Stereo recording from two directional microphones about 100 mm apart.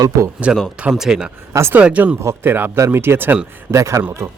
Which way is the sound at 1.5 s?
25° right (ahead or behind).